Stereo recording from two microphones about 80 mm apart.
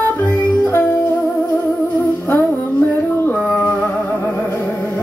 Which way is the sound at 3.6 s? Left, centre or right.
Left.